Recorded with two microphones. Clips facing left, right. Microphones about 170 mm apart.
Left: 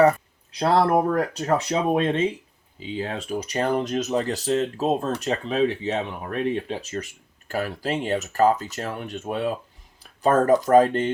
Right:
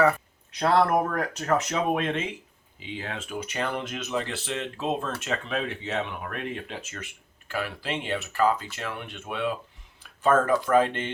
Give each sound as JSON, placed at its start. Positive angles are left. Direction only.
{"t": 0.0, "sound": "speech", "side_deg": 35}